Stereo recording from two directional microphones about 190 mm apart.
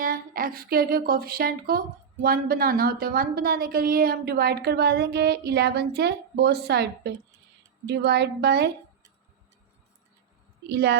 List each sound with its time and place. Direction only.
0.0 s a woman's voice: 50° right (ahead or behind)
10.7 s a woman's voice: 65° right (ahead or behind)